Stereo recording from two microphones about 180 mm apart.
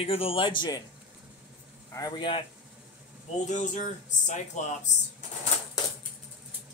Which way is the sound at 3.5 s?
40° left (ahead or behind).